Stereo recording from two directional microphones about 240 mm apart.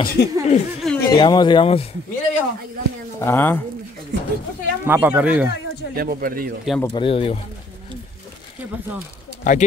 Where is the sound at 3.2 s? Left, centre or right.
Centre.